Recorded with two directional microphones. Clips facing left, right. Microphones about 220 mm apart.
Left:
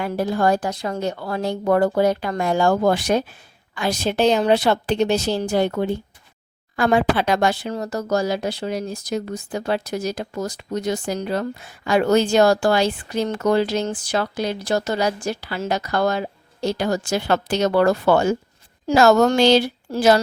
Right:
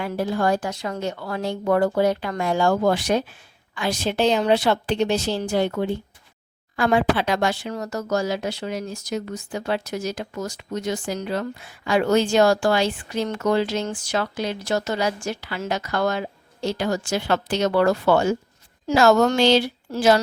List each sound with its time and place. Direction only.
0.0 s speech: 40° left (ahead or behind)